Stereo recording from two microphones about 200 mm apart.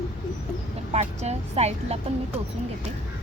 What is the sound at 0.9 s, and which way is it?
A woman's voice, 30° right (ahead or behind).